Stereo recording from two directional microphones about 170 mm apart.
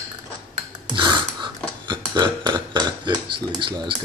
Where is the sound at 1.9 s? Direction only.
25° right (ahead or behind).